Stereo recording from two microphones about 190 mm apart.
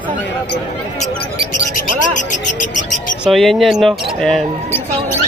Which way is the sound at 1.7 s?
40° left (ahead or behind).